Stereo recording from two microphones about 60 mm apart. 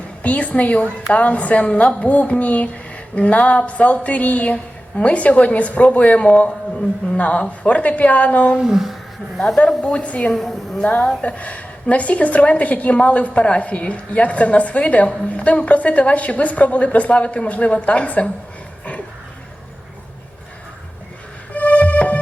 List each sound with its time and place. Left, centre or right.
0.2 s a woman's voice: left
8.5 s speech: centre
9.6 s a woman's voice: centre
10.3 s a woman's voice: centre
11.2 s a woman's voice: left
21.5 s music: left